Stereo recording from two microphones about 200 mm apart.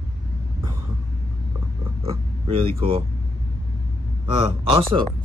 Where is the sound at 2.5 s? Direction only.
30° right (ahead or behind).